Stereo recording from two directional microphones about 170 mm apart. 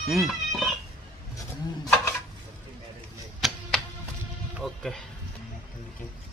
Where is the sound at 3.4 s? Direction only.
Centre (ahead or behind).